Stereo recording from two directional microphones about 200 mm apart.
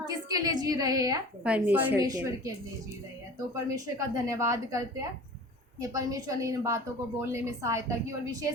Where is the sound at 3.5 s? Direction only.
15° right (ahead or behind).